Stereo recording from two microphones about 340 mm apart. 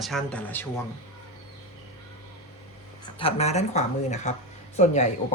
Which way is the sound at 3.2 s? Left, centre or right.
Centre.